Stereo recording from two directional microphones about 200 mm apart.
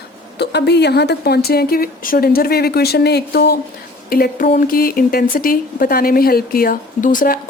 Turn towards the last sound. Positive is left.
turn(degrees=45)  # may be behind; listen again after turning